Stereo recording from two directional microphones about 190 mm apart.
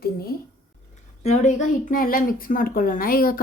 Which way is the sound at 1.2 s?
35° left (ahead or behind).